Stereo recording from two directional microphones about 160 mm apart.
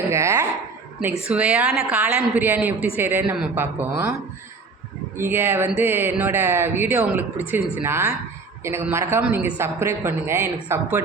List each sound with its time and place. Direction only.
0.1 s dog: 15° right (ahead or behind)
1.0 s speech: 10° right (ahead or behind)
5.1 s speech: 15° right (ahead or behind)